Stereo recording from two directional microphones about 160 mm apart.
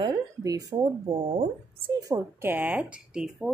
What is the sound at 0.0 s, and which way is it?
Speech, 20° right (ahead or behind).